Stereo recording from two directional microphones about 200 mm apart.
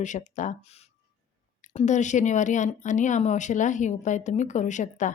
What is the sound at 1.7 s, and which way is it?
A woman's voice, 35° left (ahead or behind).